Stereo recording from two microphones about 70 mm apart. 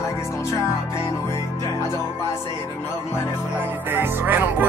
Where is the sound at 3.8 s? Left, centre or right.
Right.